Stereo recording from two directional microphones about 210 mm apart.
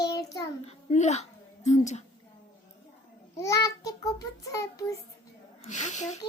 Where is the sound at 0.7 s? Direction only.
30° left (ahead or behind).